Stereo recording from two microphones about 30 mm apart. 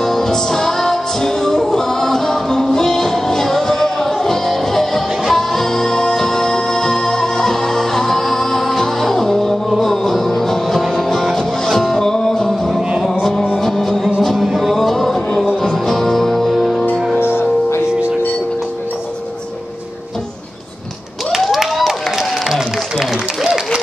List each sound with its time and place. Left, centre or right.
0.0 s music: centre
21.3 s clapping: centre
22.5 s a sound: centre